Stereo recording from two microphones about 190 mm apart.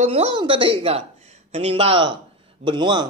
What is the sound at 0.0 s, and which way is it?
A woman's voice, 30° right (ahead or behind).